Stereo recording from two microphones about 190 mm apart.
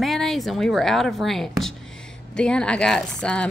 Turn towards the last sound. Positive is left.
turn(degrees=5)  # may be behind; listen again after turning